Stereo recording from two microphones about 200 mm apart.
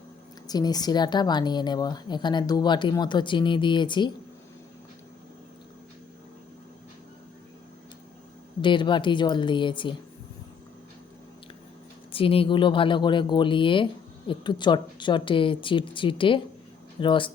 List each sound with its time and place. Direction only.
0.4 s speech: 20° left (ahead or behind)
8.6 s speech: 25° left (ahead or behind)
12.1 s speech: 25° left (ahead or behind)